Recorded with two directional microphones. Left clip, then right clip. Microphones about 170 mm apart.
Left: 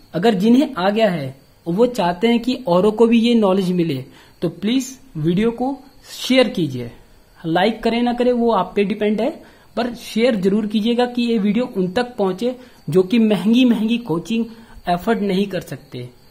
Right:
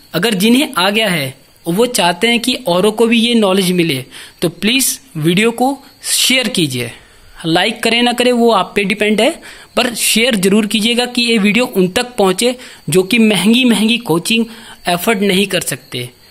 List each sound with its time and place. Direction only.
0.1 s speech: 15° right (ahead or behind)